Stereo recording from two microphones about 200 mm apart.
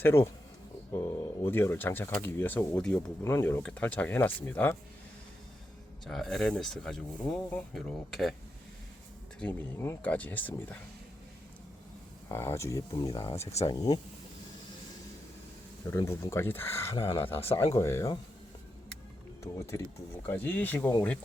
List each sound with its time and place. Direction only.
0.0 s speech: 10° left (ahead or behind)
6.1 s speech: centre (ahead or behind)
9.4 s speech: 10° left (ahead or behind)
12.3 s speech: 10° left (ahead or behind)
13.5 s speech: 35° left (ahead or behind)
13.7 s speech: 20° left (ahead or behind)
15.9 s speech: 15° left (ahead or behind)
19.4 s speech: 15° left (ahead or behind)